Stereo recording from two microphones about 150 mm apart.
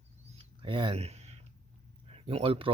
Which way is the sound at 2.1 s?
40° right (ahead or behind).